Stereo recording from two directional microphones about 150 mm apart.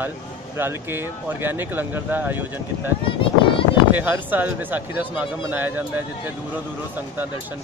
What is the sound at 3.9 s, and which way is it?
Speech, 10° right (ahead or behind).